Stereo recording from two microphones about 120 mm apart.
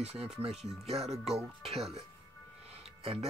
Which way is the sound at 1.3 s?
55° right (ahead or behind).